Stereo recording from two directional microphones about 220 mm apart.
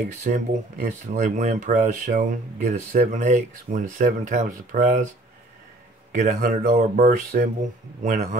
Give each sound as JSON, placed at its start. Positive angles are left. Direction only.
{"t": 0.2, "sound": "speech", "side_deg": -30}
{"t": 6.1, "sound": "speech", "side_deg": -35}